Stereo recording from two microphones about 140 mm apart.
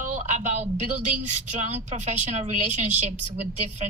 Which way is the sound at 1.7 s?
55° right (ahead or behind).